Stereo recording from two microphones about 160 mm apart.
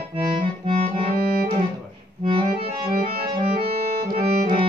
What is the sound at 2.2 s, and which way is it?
Accordion, 35° right (ahead or behind).